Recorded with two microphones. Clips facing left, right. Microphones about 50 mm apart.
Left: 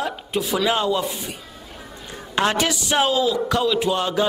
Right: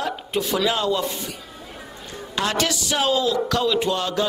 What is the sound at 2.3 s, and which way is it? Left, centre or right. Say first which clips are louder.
Music: left 4 dB; left.